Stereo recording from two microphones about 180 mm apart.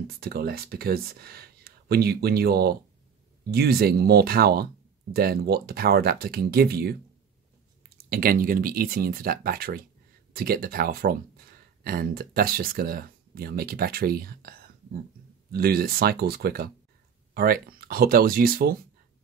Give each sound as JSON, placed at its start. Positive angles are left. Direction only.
{"t": 0.2, "sound": "speech", "side_deg": -60}
{"t": 8.0, "sound": "speech", "side_deg": -55}